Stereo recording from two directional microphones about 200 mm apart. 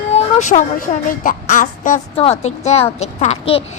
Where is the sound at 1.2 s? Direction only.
40° left (ahead or behind).